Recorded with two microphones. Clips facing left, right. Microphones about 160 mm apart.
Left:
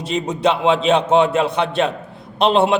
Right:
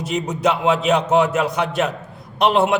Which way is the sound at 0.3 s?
30° left (ahead or behind).